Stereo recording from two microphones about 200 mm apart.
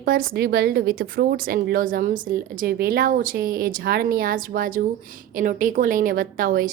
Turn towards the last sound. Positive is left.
turn(degrees=-45)  # may be behind; listen again after turning